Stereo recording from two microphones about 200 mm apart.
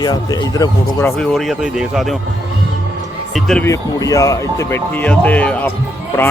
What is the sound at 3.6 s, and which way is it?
Speech, 15° left (ahead or behind).